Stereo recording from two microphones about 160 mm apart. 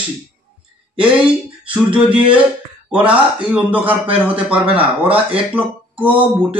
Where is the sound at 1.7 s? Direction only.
10° right (ahead or behind).